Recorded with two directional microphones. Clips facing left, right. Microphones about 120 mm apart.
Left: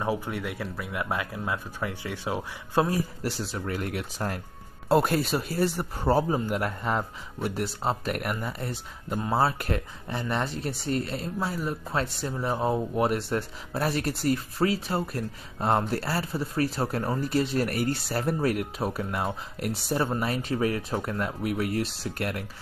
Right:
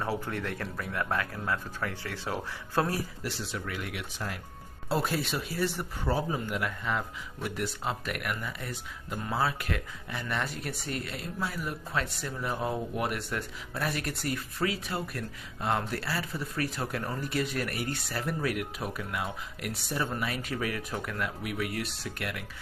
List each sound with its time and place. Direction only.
0.0 s speech: 15° left (ahead or behind)
3.2 s speech: 40° left (ahead or behind)
4.8 s speech: 50° left (ahead or behind)